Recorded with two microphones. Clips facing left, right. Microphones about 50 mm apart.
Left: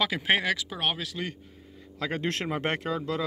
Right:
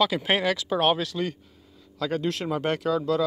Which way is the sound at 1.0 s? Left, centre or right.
Centre.